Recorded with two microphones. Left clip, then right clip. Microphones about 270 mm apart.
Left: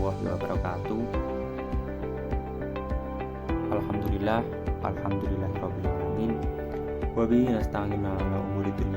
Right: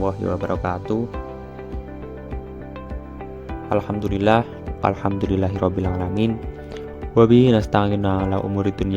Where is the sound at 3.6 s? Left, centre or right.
Right.